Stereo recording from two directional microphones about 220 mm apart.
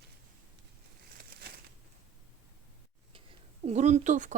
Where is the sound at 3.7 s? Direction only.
30° right (ahead or behind).